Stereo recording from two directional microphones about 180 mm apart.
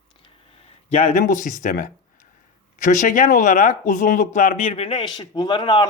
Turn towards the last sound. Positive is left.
turn(degrees=25)  # may be behind; listen again after turning